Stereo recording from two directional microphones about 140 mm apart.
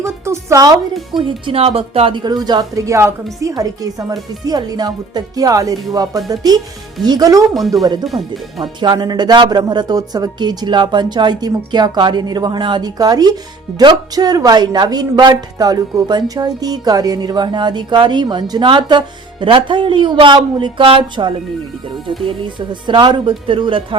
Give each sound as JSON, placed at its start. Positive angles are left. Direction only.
{"t": 0.3, "sound": "speech", "side_deg": -20}
{"t": 1.1, "sound": "speech", "side_deg": -40}
{"t": 8.0, "sound": "speech", "side_deg": 0}
{"t": 8.8, "sound": "speech", "side_deg": -30}